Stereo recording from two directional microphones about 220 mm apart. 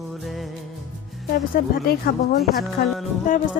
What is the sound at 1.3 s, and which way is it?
A woman's voice, 40° left (ahead or behind).